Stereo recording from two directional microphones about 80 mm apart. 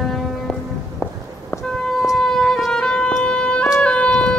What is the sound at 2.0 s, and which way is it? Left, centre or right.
Music, centre.